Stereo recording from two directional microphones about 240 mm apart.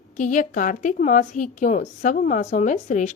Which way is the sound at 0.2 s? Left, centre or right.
Left.